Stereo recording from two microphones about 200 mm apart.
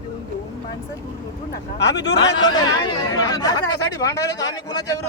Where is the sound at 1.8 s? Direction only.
60° left (ahead or behind).